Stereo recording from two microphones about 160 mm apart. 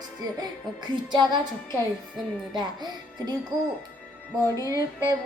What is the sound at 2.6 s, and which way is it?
Speech, 25° right (ahead or behind).